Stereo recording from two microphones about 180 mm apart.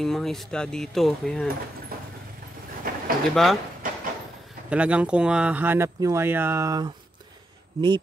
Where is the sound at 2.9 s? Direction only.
55° right (ahead or behind).